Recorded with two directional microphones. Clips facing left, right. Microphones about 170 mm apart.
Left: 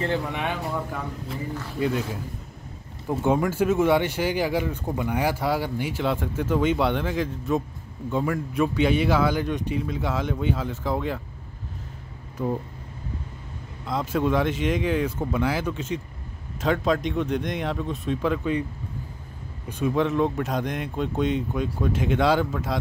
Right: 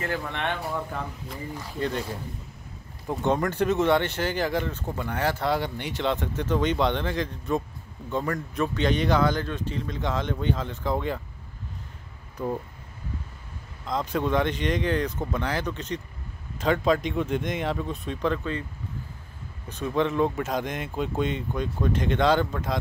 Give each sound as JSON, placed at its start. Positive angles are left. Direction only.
{"t": 0.0, "sound": "speech", "side_deg": 20}
{"t": 0.3, "sound": "speech", "side_deg": 5}
{"t": 13.8, "sound": "speech", "side_deg": 5}
{"t": 19.7, "sound": "speech", "side_deg": 5}